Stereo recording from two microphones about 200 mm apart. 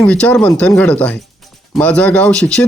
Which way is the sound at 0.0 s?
5° left (ahead or behind).